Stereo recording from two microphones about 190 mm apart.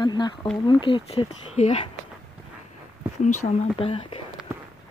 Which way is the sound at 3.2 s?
30° left (ahead or behind).